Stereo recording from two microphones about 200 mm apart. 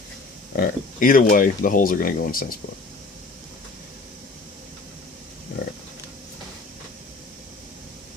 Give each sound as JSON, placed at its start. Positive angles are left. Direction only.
{"t": 0.5, "sound": "speech", "side_deg": 45}